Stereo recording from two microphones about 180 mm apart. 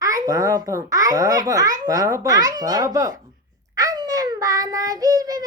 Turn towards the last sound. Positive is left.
turn(degrees=-20)  # may be behind; listen again after turning